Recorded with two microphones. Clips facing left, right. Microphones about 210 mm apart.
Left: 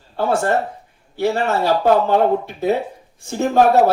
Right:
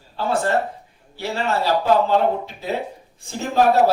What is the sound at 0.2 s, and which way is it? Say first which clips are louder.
Speech: left 3 dB; 55° left (ahead or behind).